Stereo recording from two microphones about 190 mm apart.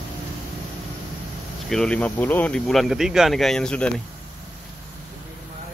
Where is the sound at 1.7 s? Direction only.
5° left (ahead or behind).